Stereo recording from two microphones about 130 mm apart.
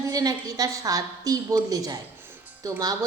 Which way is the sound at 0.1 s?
30° right (ahead or behind).